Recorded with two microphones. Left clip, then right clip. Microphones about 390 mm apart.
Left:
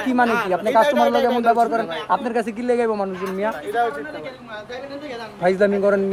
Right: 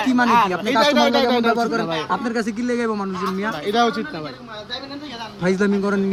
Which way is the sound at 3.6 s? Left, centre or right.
Right.